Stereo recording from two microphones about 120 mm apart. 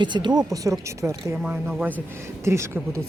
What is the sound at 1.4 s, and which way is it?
Speech, 10° right (ahead or behind).